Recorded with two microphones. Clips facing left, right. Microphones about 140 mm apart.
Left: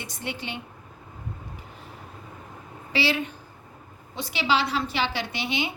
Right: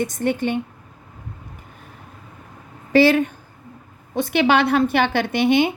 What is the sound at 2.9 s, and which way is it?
A woman's voice, 50° right (ahead or behind).